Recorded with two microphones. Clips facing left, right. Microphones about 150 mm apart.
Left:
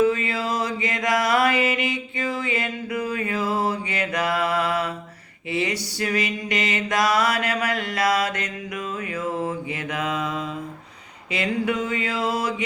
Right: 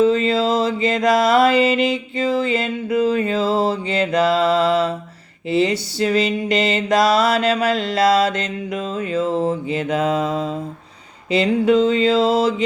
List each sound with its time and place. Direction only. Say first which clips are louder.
0.3 s mantra: right 8 dB; 25° right (ahead or behind)